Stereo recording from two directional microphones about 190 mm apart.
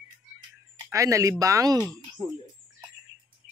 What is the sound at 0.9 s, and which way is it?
Speech, 15° right (ahead or behind).